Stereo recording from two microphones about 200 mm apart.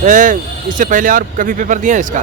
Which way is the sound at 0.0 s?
40° right (ahead or behind).